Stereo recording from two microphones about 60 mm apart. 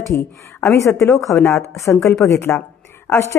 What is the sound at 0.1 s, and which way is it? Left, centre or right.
A woman's voice, left.